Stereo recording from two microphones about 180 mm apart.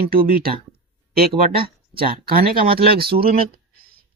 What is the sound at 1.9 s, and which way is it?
Speech, 55° right (ahead or behind).